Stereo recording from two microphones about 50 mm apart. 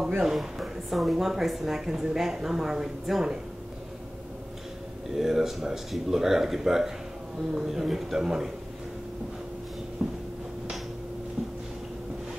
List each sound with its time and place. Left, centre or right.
0.2 s a woman's voice: centre
5.1 s a woman's voice: centre
10.0 s a woman's voice: centre